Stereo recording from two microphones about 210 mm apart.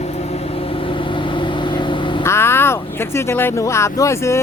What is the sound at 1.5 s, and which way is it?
Vehicle, 20° left (ahead or behind).